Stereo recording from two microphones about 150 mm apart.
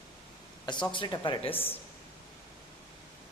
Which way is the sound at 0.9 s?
30° left (ahead or behind).